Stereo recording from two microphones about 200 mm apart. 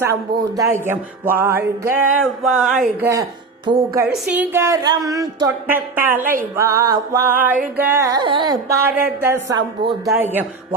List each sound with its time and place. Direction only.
0.0 s music: 15° right (ahead or behind)
3.0 s music: 15° right (ahead or behind)
7.8 s carnatic music: 10° right (ahead or behind)
9.2 s music: 15° right (ahead or behind)